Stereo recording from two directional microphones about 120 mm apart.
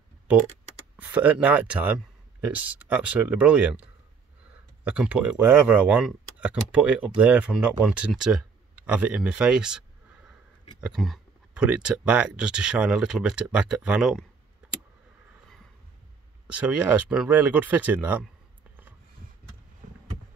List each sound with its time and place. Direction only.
0.3 s speech: 10° right (ahead or behind)
4.8 s speech: 10° right (ahead or behind)
11.0 s speech: centre (ahead or behind)
11.5 s speech: 10° right (ahead or behind)
16.4 s speech: 10° right (ahead or behind)